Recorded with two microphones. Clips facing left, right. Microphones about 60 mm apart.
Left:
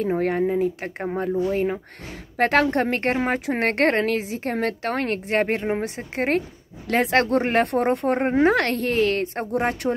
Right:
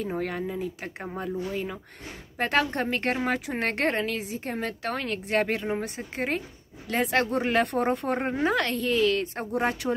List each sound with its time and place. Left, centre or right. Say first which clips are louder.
0.2 s speech: left 9 dB; left
2.3 s speech: left 6 dB; left
3.3 s speech: left 6 dB; left
5.9 s speech: left 6 dB; left
9.8 s speech: left 4 dB; centre